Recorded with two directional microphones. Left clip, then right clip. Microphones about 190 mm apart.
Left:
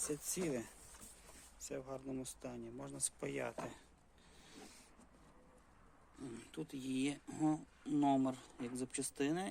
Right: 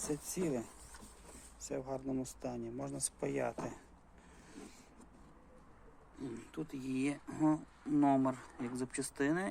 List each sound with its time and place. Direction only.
0.0 s speech: 20° left (ahead or behind)
1.6 s speech: 5° left (ahead or behind)
6.1 s speech: 15° left (ahead or behind)